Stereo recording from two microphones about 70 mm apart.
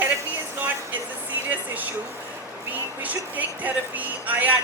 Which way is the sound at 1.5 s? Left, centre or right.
Right.